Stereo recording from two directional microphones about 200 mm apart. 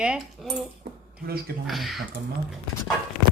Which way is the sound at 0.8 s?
55° right (ahead or behind).